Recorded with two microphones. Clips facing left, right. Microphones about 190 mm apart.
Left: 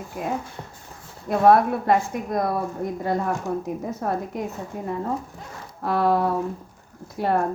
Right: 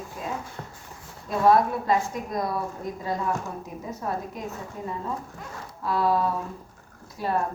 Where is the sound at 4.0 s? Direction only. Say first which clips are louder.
Left 2 dB; 60° left (ahead or behind).